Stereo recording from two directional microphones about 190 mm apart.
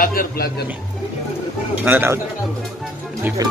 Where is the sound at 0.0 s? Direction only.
50° left (ahead or behind).